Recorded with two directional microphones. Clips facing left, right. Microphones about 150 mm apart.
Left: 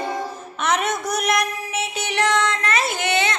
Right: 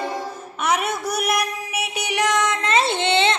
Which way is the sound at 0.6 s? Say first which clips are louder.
Even; 5° right (ahead or behind).